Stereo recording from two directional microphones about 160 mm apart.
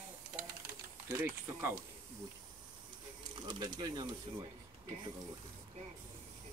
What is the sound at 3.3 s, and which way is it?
Speech, 30° right (ahead or behind).